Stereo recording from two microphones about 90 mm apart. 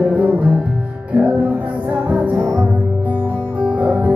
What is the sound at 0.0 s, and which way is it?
Music, 15° right (ahead or behind).